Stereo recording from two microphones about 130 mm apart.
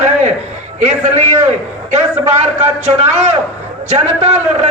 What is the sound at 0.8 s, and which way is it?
A man's voice, 60° right (ahead or behind).